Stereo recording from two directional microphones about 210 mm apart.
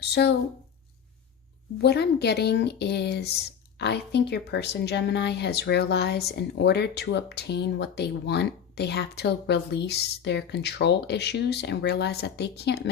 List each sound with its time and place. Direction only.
0.0 s speech: 50° left (ahead or behind)
1.8 s speech: 50° left (ahead or behind)